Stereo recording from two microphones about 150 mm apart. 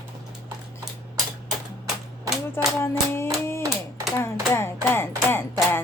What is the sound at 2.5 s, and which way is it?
Hands, 15° left (ahead or behind).